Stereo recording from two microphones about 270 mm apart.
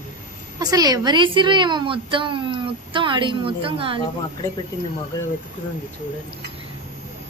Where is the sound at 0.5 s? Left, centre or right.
Centre.